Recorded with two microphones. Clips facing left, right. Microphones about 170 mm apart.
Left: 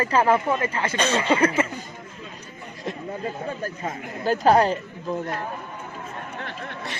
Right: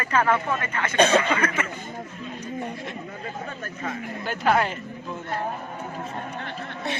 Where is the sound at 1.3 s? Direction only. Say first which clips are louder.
Left 5 dB; 30° left (ahead or behind).